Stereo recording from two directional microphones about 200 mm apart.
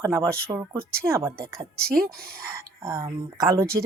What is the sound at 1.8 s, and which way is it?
Speech, 50° right (ahead or behind).